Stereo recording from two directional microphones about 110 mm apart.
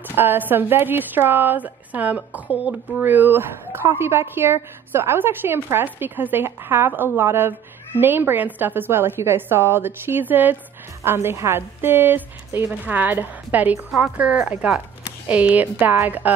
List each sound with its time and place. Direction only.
0.1 s a woman's voice: 20° right (ahead or behind)